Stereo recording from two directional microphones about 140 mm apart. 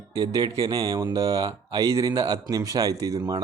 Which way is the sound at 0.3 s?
25° right (ahead or behind).